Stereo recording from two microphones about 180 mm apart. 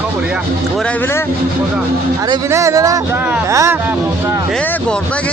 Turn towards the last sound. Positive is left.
turn(degrees=-15)  # may be behind; listen again after turning